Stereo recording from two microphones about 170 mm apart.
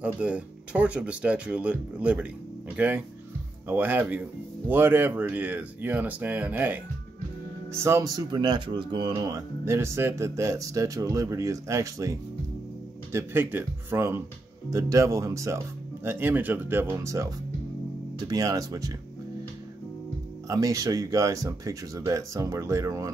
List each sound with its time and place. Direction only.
0.0 s speech: 5° right (ahead or behind)
20.4 s speech: 20° right (ahead or behind)